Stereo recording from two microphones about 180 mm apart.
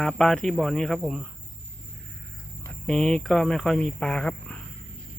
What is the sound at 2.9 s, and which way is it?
Speech, 5° left (ahead or behind).